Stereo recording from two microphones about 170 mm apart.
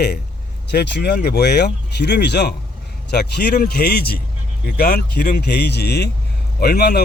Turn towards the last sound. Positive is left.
turn(degrees=65)  # may be behind; listen again after turning